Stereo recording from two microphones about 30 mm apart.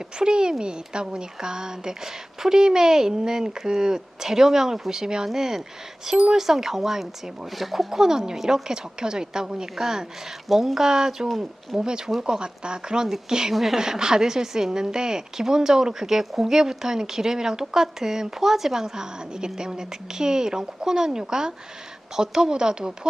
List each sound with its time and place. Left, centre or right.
0.2 s a woman's voice: right; by 7.9 s centre
7.9 s a woman's voice: centre
13.5 s a woman's voice: centre
13.7 s a woman's voice: centre